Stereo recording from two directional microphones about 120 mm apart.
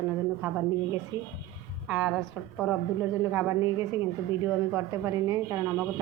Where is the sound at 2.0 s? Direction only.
Centre (ahead or behind).